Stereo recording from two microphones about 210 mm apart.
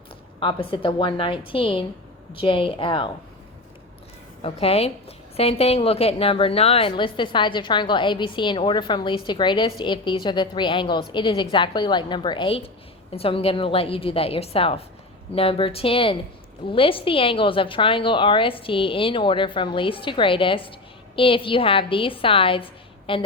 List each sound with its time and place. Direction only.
0.3 s a woman's voice: 25° left (ahead or behind)
4.4 s a woman's voice: 30° left (ahead or behind)